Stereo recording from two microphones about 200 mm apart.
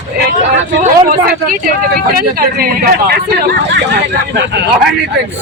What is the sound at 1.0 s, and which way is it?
Speech, 45° right (ahead or behind).